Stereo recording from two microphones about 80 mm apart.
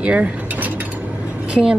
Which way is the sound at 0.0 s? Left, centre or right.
Centre.